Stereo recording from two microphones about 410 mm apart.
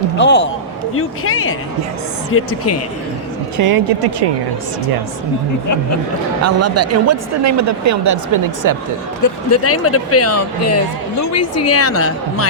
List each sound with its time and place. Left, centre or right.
0.2 s a man's voice: left
3.6 s speech: right
6.4 s speech: right
9.2 s speech: left